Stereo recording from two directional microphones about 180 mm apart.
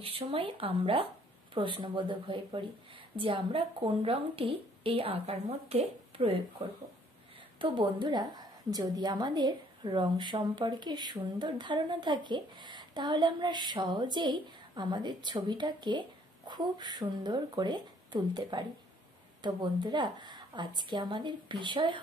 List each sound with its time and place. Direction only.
0.0 s a woman's voice: 30° right (ahead or behind)
7.5 s a woman's voice: 25° right (ahead or behind)